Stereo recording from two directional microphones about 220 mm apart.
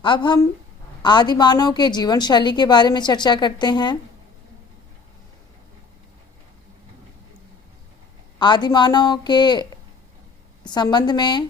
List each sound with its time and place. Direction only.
0.0 s a woman's voice: 20° left (ahead or behind)
8.4 s a woman's voice: 20° left (ahead or behind)
10.7 s a woman's voice: 20° left (ahead or behind)